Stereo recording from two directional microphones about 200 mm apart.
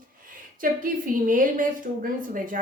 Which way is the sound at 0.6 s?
45° right (ahead or behind).